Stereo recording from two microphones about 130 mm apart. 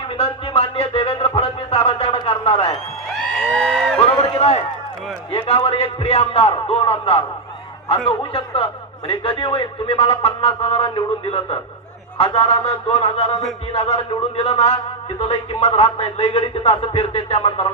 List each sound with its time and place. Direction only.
0.2 s music: 50° left (ahead or behind)
3.3 s a sound: 5° left (ahead or behind)
4.4 s run: 50° left (ahead or behind)
5.3 s a man's voice: 45° left (ahead or behind)